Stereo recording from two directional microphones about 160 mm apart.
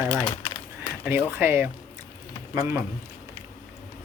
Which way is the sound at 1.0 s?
10° right (ahead or behind).